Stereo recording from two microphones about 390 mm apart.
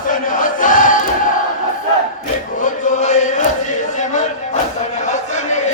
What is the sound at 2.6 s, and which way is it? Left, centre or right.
Chant, centre.